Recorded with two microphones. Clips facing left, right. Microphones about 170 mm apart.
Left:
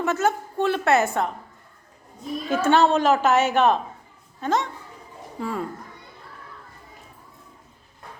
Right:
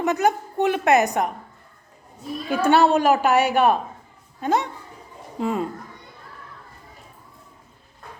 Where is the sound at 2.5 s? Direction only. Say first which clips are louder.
Right 1 dB; 10° right (ahead or behind).